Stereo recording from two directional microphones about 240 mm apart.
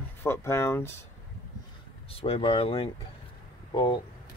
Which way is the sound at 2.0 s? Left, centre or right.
Left.